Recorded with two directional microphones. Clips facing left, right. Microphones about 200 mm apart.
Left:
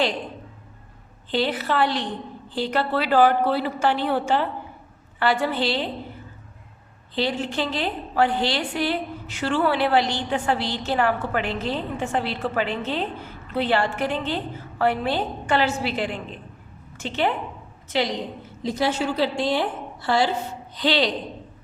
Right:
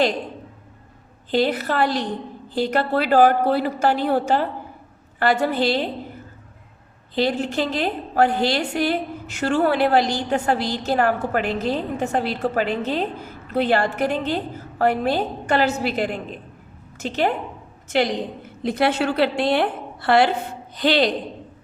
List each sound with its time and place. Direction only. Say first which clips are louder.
1.3 s a woman's voice: right 3 dB; 45° right (ahead or behind)
7.2 s a woman's voice: right 3 dB; 45° right (ahead or behind)
18.6 s a woman's voice: right 3 dB; 60° right (ahead or behind)
20.7 s a woman's voice: right 3 dB; 50° right (ahead or behind)